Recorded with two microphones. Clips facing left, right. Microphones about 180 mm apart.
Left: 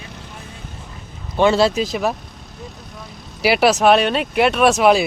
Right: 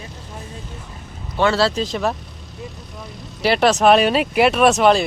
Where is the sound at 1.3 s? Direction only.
15° left (ahead or behind).